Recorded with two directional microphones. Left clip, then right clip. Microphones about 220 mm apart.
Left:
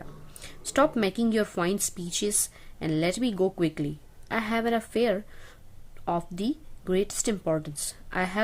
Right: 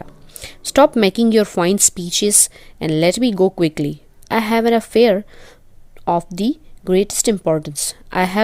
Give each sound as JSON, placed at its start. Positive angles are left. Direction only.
{"t": 0.0, "sound": "a woman's voice", "side_deg": -35}